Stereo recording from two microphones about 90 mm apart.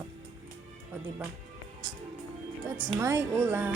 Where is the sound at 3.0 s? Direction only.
30° right (ahead or behind).